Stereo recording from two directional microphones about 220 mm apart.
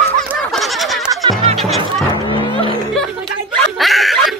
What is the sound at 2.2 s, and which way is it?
Music, 20° left (ahead or behind).